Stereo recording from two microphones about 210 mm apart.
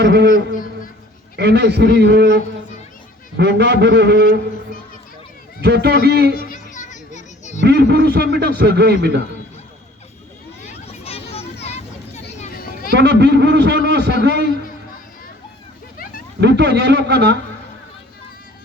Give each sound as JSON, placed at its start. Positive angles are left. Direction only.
{"t": 0.0, "sound": "a man's voice", "side_deg": -55}
{"t": 5.6, "sound": "a man's voice", "side_deg": -50}
{"t": 6.3, "sound": "a sound", "side_deg": 40}
{"t": 7.6, "sound": "a man's voice", "side_deg": -50}
{"t": 10.8, "sound": "a sound", "side_deg": 30}
{"t": 12.4, "sound": "children playing", "side_deg": 40}
{"t": 13.0, "sound": "a man's voice", "side_deg": -55}
{"t": 16.4, "sound": "a man's voice", "side_deg": -55}